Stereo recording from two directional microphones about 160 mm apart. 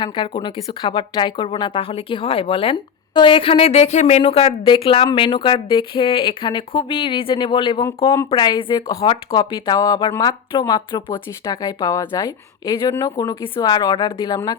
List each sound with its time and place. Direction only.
0.0 s a woman's voice: 30° left (ahead or behind)